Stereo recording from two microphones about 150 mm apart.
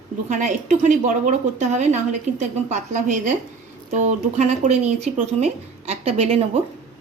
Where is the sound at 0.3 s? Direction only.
55° right (ahead or behind).